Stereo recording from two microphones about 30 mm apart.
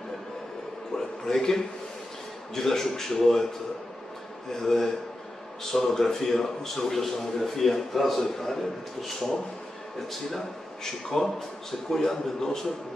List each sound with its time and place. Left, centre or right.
0.9 s a man's voice: centre
4.5 s a man's voice: centre